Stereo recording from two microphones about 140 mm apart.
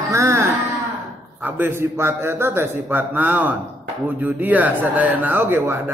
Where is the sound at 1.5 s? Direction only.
15° right (ahead or behind).